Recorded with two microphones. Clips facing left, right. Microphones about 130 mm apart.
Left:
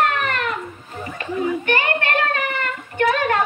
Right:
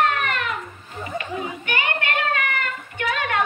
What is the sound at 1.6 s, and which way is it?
Child singing, 35° left (ahead or behind).